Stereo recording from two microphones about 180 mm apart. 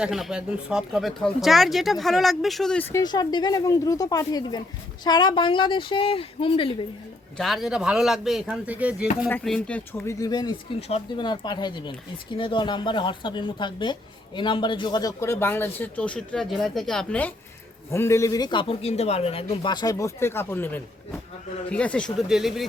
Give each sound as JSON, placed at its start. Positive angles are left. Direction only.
{"t": 0.0, "sound": "speech", "side_deg": 0}
{"t": 3.0, "sound": "a man's voice", "side_deg": 20}
{"t": 7.3, "sound": "speech", "side_deg": 0}
{"t": 9.3, "sound": "a man's voice", "side_deg": 5}
{"t": 10.8, "sound": "a man's voice", "side_deg": 35}